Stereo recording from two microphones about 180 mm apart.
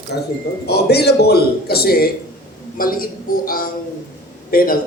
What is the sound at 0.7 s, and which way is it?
A man's voice, 65° left (ahead or behind).